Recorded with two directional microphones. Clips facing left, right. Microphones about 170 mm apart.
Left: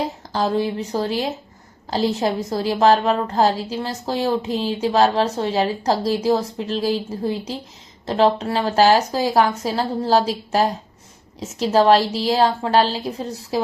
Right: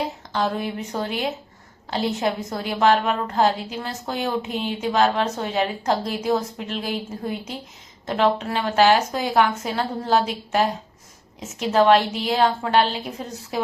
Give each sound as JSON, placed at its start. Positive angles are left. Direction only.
{"t": 0.3, "sound": "a woman's voice", "side_deg": 30}